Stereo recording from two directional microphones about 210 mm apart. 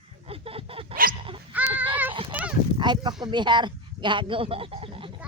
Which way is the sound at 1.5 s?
10° right (ahead or behind).